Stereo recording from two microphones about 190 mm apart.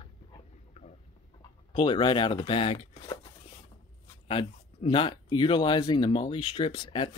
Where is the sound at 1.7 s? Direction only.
25° left (ahead or behind).